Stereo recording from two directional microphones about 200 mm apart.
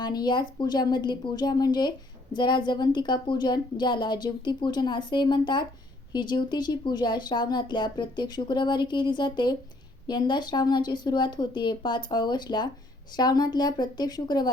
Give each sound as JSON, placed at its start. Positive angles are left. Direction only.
{"t": 0.0, "sound": "speech", "side_deg": 20}